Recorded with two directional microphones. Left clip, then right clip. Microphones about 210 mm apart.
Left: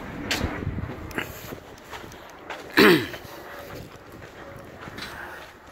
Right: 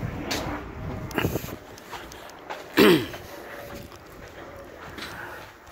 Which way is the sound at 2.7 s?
Centre (ahead or behind).